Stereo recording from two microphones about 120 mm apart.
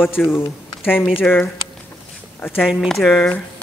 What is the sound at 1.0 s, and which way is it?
Speech, 5° right (ahead or behind).